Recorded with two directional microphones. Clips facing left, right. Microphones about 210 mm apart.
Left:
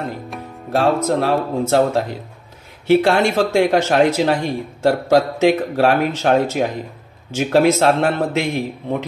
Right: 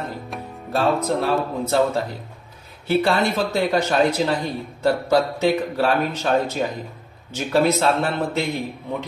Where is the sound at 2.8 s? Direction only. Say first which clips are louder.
Left 5 dB; 80° left.